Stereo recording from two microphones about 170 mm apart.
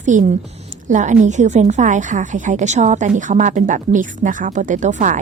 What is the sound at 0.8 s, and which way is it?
A woman's voice, 45° right (ahead or behind).